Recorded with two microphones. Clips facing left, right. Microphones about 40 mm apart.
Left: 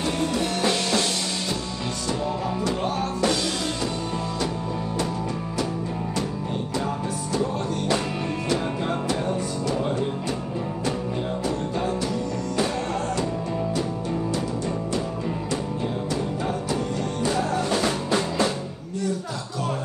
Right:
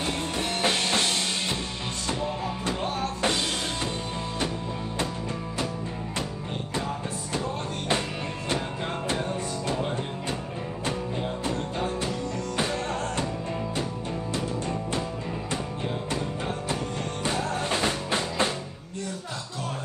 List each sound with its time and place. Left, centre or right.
0.2 s music: right
2.6 s music: right
17.5 s music: right